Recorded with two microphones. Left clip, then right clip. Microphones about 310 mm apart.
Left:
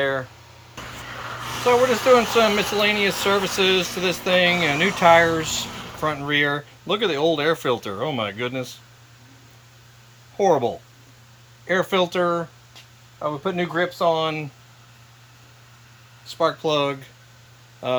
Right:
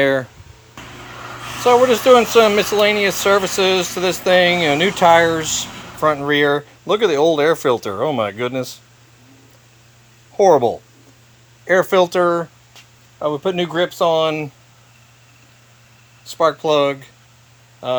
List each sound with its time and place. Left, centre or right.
0.0 s speech: right
1.6 s speech: right
10.3 s speech: centre
16.2 s speech: centre